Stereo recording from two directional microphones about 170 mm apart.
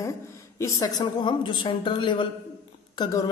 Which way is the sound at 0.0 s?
15° left (ahead or behind).